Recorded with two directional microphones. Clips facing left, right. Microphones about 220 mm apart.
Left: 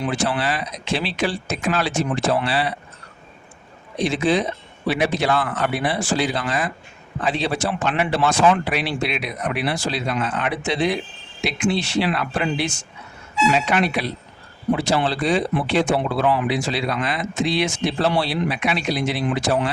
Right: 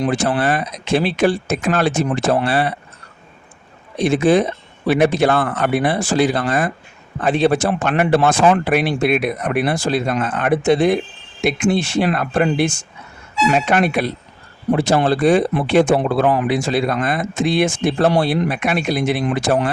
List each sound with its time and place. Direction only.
0.0 s speech: 50° right (ahead or behind)
3.9 s speech: 50° right (ahead or behind)